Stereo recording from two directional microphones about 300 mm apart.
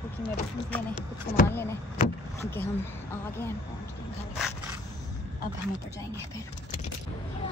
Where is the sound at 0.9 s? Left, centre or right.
Left.